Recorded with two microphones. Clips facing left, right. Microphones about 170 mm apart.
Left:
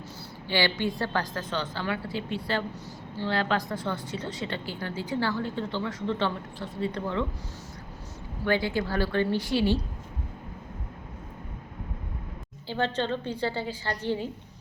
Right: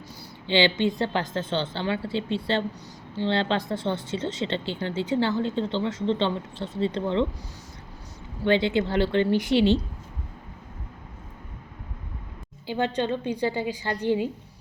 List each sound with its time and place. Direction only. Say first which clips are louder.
0.4 s speech: right 5 dB; 20° right (ahead or behind)
8.4 s speech: right 4 dB; 25° right (ahead or behind)
12.6 s a woman's voice: right 3 dB; 15° right (ahead or behind)